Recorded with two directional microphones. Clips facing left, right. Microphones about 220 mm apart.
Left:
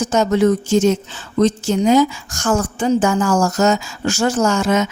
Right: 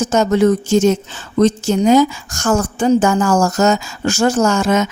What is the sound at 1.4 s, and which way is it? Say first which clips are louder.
A woman's voice: right 2 dB; 45° right (ahead or behind).